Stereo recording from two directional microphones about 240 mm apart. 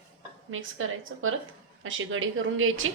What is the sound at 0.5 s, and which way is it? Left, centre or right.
Speech, right.